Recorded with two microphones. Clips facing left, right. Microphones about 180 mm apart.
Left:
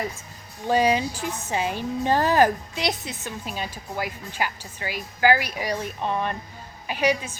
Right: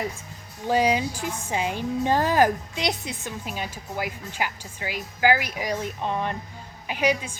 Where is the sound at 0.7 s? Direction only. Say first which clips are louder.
Left 1 dB; 10° right (ahead or behind).